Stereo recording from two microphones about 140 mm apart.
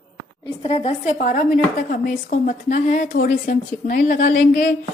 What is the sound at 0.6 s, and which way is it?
Speech, 40° left (ahead or behind).